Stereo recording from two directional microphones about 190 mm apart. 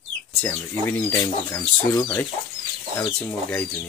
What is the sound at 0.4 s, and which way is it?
Speech, 15° left (ahead or behind).